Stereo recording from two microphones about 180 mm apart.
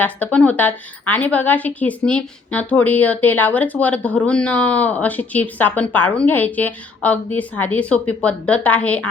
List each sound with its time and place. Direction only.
0.0 s speech: 10° left (ahead or behind)